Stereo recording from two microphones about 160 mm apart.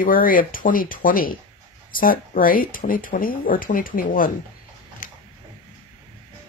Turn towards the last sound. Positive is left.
turn(degrees=55)  # may be behind; listen again after turning